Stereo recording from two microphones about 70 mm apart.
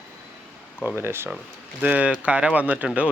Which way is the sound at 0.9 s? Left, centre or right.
Right.